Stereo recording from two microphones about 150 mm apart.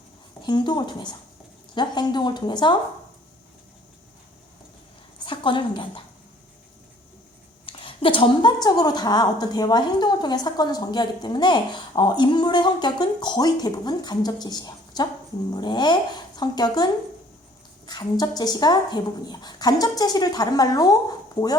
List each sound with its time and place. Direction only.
0.4 s a woman's voice: 30° left (ahead or behind)
5.2 s a woman's voice: 35° left (ahead or behind)
7.7 s a sound: 35° left (ahead or behind)
8.6 s a woman's voice: 25° left (ahead or behind)